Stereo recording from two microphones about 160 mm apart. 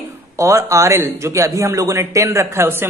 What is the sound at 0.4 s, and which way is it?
Speech, 20° right (ahead or behind).